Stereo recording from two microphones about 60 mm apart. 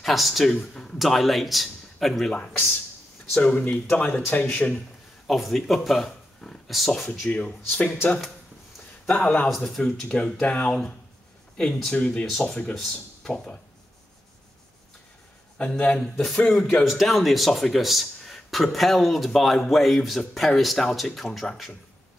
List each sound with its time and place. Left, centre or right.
0.0 s speech: centre
2.3 s speech: left
5.2 s speech: centre
6.4 s a sound: centre
6.9 s speech: centre
7.2 s speech: left
9.0 s speech: centre
12.3 s speech: centre
15.6 s speech: centre
16.0 s speech: centre
21.3 s speech: centre